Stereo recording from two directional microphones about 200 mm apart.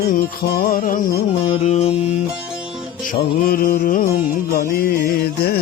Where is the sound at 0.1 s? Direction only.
45° left (ahead or behind).